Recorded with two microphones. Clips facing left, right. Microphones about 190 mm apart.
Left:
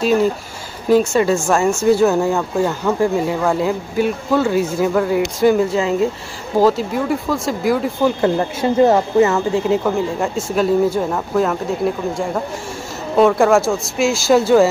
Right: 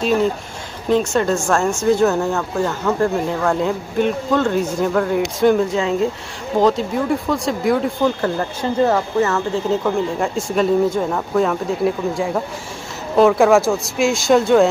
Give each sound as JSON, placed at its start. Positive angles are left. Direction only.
{"t": 0.0, "sound": "speech", "side_deg": 5}
{"t": 8.8, "sound": "speech", "side_deg": 20}
{"t": 9.8, "sound": "speech", "side_deg": 0}